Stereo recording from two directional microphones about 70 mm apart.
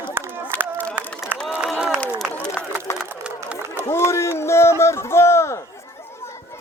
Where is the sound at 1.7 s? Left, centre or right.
Centre.